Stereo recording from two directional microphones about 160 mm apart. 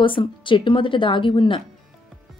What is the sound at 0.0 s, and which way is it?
A woman's voice, 30° left (ahead or behind).